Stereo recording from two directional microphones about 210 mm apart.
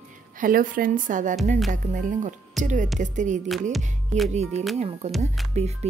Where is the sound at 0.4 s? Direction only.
40° right (ahead or behind).